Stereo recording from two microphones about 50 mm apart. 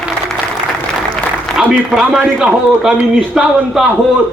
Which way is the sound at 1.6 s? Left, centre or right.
Centre.